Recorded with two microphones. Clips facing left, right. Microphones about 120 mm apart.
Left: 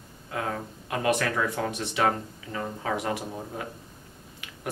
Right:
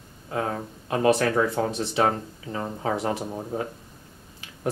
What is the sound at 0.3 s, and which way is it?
Speech, 30° right (ahead or behind).